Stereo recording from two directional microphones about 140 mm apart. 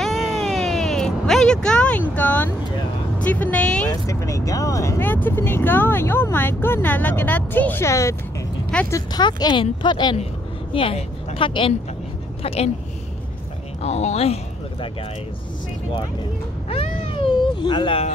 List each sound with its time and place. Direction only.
0.0 s cat: centre (ahead or behind)
3.3 s speech: 10° left (ahead or behind)
3.9 s speech: 20° left (ahead or behind); by 12.7 s 45° left (ahead or behind)
13.8 s speech: 50° left (ahead or behind)
16.6 s a sound: 40° left (ahead or behind)